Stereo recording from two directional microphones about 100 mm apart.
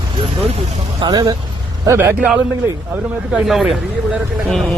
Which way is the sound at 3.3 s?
5° right (ahead or behind).